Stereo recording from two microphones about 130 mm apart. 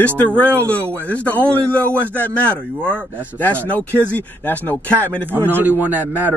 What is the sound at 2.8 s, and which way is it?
Speech, 10° left (ahead or behind).